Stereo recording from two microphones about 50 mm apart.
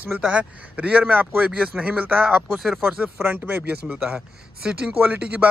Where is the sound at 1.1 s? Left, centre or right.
Right.